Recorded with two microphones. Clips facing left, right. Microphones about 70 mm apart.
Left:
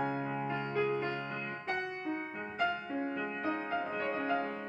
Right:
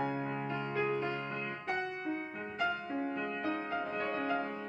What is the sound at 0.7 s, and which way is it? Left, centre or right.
Music, centre.